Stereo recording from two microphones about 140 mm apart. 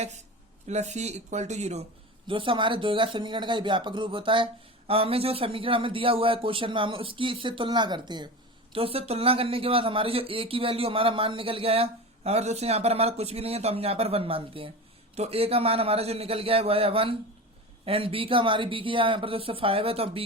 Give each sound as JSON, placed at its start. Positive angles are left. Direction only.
{"t": 0.7, "sound": "speech", "side_deg": -55}
{"t": 2.2, "sound": "a man's voice", "side_deg": -40}
{"t": 8.7, "sound": "a man's voice", "side_deg": -45}